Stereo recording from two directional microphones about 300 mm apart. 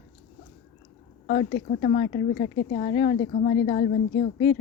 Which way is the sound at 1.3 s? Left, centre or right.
Left.